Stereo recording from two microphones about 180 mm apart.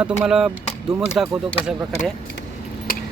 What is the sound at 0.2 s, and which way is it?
Speech, 5° right (ahead or behind).